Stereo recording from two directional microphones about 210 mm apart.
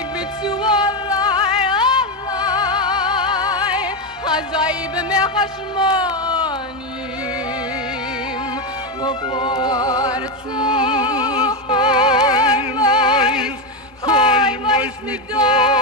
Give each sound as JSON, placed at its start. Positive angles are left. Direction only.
{"t": 0.5, "sound": "music", "side_deg": 20}
{"t": 5.2, "sound": "speech", "side_deg": 20}
{"t": 9.0, "sound": "music", "side_deg": 20}
{"t": 14.0, "sound": "a sound", "side_deg": 25}
{"t": 15.3, "sound": "music", "side_deg": 20}